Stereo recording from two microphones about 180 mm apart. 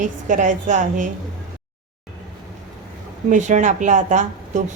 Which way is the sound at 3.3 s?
45° right (ahead or behind).